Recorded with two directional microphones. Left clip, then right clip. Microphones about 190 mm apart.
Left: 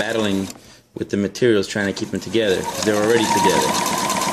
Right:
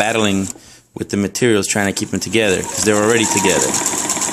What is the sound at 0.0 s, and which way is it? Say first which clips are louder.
Speech: right 5 dB; 35° right (ahead or behind).